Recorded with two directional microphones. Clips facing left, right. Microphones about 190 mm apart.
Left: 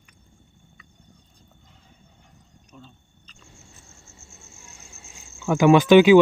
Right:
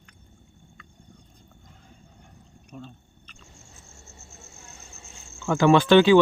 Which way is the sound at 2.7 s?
50° right (ahead or behind).